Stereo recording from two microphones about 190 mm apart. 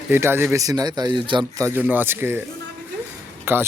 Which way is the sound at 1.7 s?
10° right (ahead or behind).